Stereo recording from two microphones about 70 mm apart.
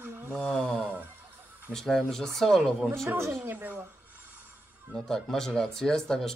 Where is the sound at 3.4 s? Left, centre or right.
Right.